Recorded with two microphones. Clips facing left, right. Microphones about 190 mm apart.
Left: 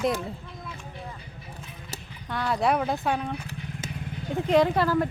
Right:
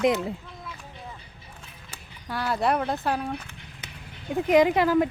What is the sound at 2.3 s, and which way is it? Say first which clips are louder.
Speech: even; 5° right (ahead or behind).